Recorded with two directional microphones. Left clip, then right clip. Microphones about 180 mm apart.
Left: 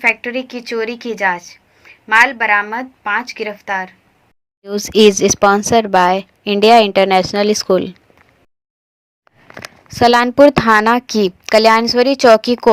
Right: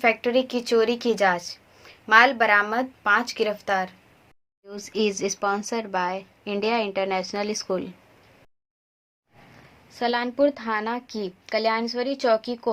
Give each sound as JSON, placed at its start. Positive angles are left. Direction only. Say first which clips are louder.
{"t": 0.0, "sound": "a woman's voice", "louder": "left 5 dB", "side_deg": -20}
{"t": 4.6, "sound": "speech", "louder": "left 16 dB", "side_deg": 35}
{"t": 10.0, "sound": "a woman's voice", "louder": "left 14 dB", "side_deg": 40}